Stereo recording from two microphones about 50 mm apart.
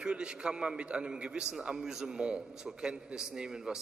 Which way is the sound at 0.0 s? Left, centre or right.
Centre.